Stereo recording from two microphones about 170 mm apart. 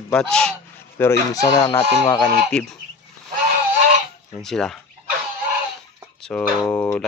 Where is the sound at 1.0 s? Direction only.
15° left (ahead or behind).